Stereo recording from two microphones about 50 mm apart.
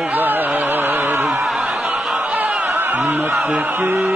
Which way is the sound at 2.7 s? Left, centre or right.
Right.